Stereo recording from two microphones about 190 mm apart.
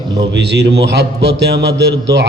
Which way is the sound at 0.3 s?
60° right (ahead or behind).